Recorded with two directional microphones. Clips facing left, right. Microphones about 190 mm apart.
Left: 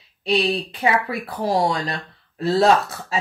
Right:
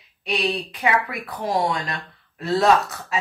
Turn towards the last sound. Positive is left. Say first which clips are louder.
# left 1 dB
turn(degrees=30)  # may be behind; listen again after turning